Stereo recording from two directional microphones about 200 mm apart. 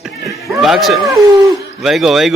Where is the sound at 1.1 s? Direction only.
15° right (ahead or behind).